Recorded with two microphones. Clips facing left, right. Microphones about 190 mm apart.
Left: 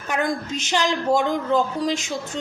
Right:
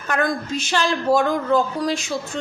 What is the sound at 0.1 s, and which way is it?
Speech, 20° left (ahead or behind).